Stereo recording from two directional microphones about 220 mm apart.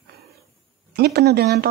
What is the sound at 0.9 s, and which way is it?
Speech, 45° right (ahead or behind).